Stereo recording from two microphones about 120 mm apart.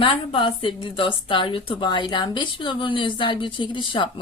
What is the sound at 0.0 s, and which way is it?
Speech, 45° left (ahead or behind).